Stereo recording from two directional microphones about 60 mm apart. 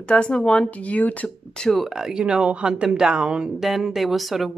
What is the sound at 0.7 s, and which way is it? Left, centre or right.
Speech, left.